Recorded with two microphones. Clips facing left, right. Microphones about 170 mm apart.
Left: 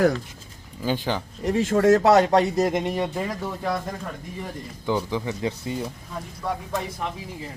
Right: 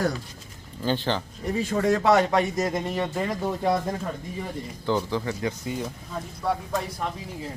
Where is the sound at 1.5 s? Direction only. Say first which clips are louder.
Left 5 dB; 90° left.